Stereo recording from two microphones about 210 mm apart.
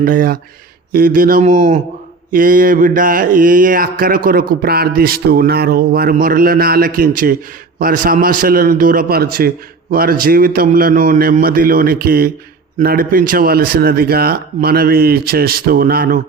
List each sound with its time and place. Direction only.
0.0 s mantra: 40° right (ahead or behind)
4.3 s speech: 45° right (ahead or behind)